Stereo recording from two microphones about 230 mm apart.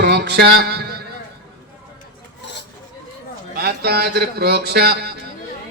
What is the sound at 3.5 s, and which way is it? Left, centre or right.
Speech, right.